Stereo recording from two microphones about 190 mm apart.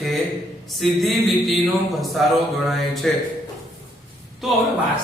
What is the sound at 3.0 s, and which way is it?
Speech, 5° left (ahead or behind).